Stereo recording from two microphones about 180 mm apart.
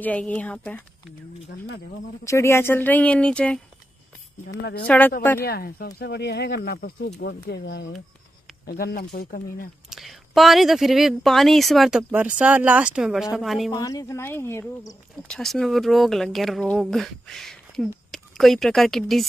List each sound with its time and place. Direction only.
0.0 s speech: 5° left (ahead or behind)
2.2 s speech: 15° left (ahead or behind)
4.6 s speech: 70° left (ahead or behind)
4.8 s speech: 10° left (ahead or behind)
5.4 s speech: 60° left (ahead or behind)
8.6 s speech: 55° left (ahead or behind)
9.8 s speech: centre (ahead or behind)
13.7 s speech: 20° left (ahead or behind)
15.2 s speech: 5° left (ahead or behind)